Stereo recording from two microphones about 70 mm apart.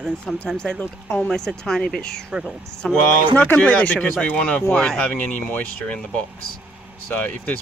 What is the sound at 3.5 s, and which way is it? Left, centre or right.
Speech, left.